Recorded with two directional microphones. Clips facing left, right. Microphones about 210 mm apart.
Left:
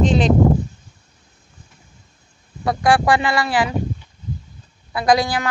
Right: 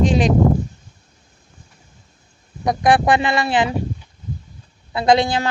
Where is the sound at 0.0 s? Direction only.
10° right (ahead or behind).